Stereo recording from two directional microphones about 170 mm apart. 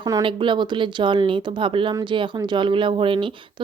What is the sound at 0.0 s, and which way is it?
Speech, 25° right (ahead or behind).